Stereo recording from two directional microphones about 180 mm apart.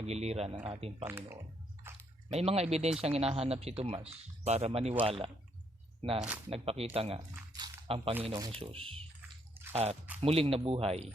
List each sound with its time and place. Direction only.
0.0 s speech: 35° right (ahead or behind)
1.0 s speech: 10° right (ahead or behind)
2.3 s speech: 35° right (ahead or behind)